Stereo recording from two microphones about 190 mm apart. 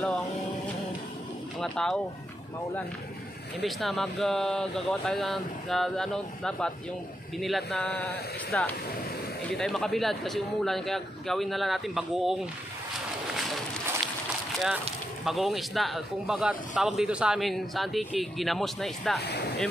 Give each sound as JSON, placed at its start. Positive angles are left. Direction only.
{"t": 1.6, "sound": "speech", "side_deg": 0}
{"t": 3.6, "sound": "speech", "side_deg": 0}
{"t": 15.2, "sound": "speech", "side_deg": 0}
{"t": 19.1, "sound": "speech", "side_deg": 60}